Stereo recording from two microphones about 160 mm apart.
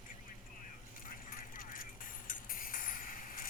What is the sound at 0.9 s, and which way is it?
Music, 60° left (ahead or behind).